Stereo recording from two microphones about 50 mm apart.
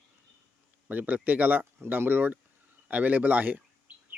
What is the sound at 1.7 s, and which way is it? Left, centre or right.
Speech, right.